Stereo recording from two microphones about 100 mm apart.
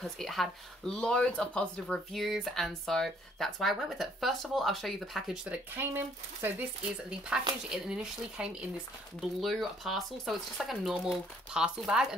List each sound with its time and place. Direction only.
0.0 s speech: centre (ahead or behind)
5.8 s speech: 20° right (ahead or behind)
7.1 s speech: 5° right (ahead or behind)